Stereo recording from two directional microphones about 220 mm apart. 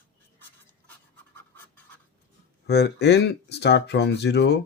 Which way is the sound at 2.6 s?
50° left (ahead or behind).